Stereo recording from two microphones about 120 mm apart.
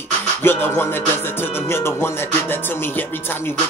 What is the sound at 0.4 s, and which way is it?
Music, 20° left (ahead or behind).